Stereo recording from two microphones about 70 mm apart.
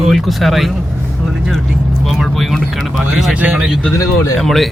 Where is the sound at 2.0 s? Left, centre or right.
Centre.